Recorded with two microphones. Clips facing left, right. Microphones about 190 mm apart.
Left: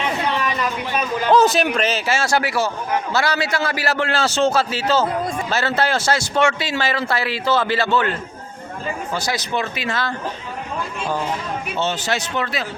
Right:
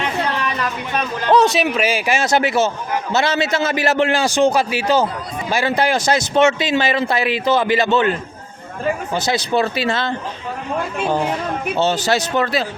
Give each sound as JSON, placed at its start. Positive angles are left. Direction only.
{"t": 0.5, "sound": "a man's voice", "side_deg": 5}
{"t": 9.1, "sound": "a man's voice", "side_deg": -25}
{"t": 11.8, "sound": "speech", "side_deg": -35}